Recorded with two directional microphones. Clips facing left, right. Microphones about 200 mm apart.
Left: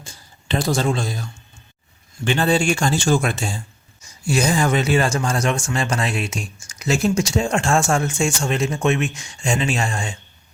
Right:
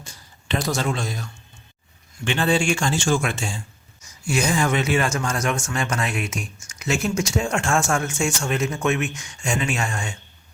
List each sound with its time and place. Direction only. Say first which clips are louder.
0.0 s speech: left 1 dB; 30° left (ahead or behind)